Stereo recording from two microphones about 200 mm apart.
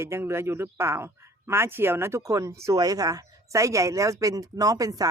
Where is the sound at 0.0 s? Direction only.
10° right (ahead or behind).